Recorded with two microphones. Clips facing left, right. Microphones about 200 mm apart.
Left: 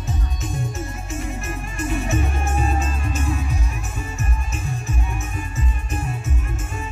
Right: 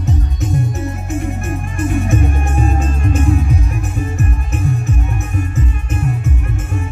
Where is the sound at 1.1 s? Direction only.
55° right (ahead or behind).